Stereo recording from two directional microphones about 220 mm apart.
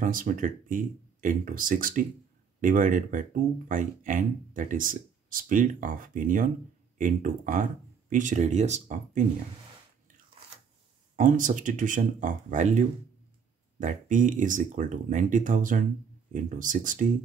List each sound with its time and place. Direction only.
0.0 s speech: 40° right (ahead or behind)
11.1 s speech: 35° right (ahead or behind)